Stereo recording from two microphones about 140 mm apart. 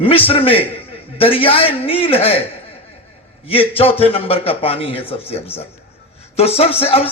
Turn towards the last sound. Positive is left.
turn(degrees=45)  # may be behind; listen again after turning